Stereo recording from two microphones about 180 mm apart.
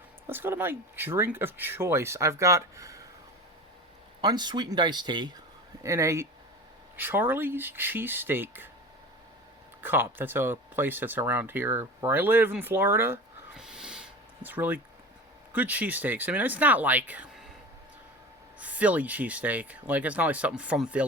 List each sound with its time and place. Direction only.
0.3 s speech: 10° right (ahead or behind)
4.2 s speech: 25° right (ahead or behind)
9.8 s speech: 10° right (ahead or behind)
13.6 s a sound: 5° right (ahead or behind)
15.5 s speech: 10° right (ahead or behind)
18.6 s speech: 10° right (ahead or behind)